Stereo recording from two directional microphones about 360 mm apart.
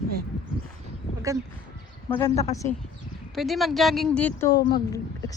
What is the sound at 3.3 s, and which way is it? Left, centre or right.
A woman's voice, centre.